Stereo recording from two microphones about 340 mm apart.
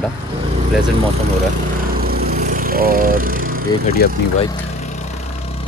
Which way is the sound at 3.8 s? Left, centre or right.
Left.